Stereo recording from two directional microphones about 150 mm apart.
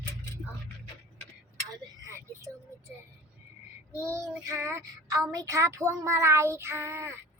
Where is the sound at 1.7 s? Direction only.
20° right (ahead or behind).